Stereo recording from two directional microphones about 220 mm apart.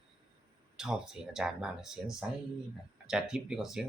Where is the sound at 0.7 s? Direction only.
5° right (ahead or behind).